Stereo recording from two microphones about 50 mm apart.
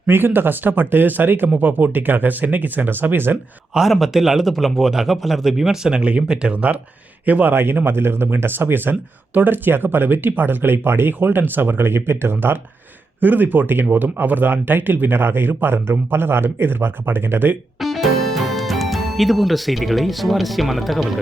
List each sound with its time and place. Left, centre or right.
0.1 s speech: right
3.9 s speech: centre
6.5 s speech: right
7.5 s speech: right
13.1 s speech: right
17.7 s speech: centre